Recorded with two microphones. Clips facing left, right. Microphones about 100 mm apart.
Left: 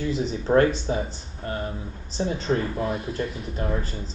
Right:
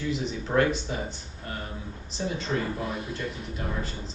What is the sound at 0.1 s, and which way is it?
Speech, 35° left (ahead or behind).